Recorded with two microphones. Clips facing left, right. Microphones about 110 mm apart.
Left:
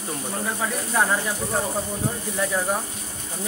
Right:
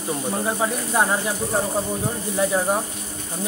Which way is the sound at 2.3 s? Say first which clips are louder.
Right 5 dB; 20° right (ahead or behind).